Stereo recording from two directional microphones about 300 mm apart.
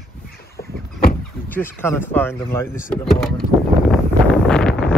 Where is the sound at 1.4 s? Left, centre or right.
Centre.